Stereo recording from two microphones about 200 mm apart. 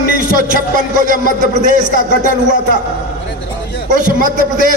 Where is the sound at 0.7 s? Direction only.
40° right (ahead or behind).